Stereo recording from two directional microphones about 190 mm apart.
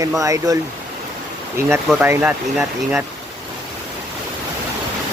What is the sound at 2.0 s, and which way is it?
Speech, 10° right (ahead or behind).